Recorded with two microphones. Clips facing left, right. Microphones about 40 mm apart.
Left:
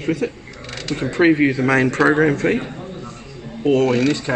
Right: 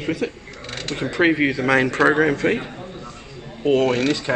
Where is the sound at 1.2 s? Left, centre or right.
Centre.